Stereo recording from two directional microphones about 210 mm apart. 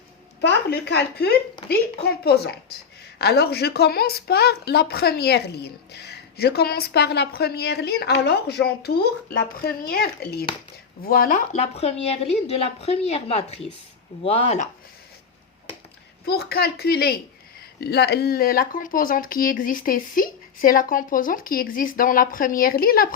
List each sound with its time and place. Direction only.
0.4 s speech: 55° left (ahead or behind); by 14.7 s 30° left (ahead or behind)
16.2 s speech: 50° left (ahead or behind)